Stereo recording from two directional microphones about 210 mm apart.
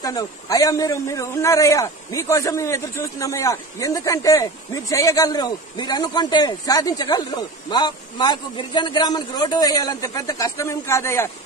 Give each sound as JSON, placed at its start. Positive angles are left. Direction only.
{"t": 0.0, "sound": "a man's voice", "side_deg": 15}